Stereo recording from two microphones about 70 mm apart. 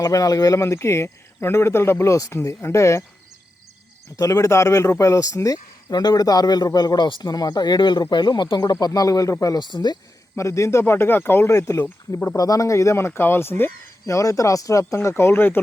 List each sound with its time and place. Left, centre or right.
0.0 s speech: left
4.2 s speech: left
9.6 s speech: left
10.3 s speech: left
12.4 s speech: left
14.1 s speech: left
14.9 s speech: left